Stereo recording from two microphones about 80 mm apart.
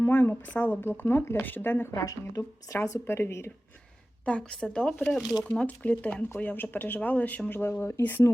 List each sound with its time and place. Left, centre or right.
0.0 s speech: left
1.9 s speech: left
4.3 s speech: centre; by 8.0 s left